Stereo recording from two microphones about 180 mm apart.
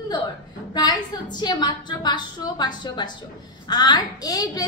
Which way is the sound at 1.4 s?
25° left (ahead or behind).